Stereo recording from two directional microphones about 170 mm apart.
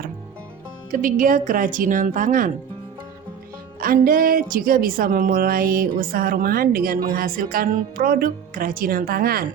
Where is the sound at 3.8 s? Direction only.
55° right (ahead or behind).